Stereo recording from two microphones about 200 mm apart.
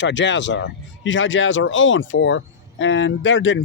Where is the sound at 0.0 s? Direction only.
65° left (ahead or behind).